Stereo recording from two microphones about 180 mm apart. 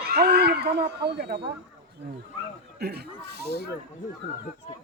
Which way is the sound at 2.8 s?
65° right (ahead or behind).